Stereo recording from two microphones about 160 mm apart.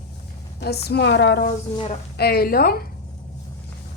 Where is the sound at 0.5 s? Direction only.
90° left.